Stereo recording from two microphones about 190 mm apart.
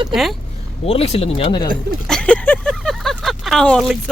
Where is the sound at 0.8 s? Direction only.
30° left (ahead or behind).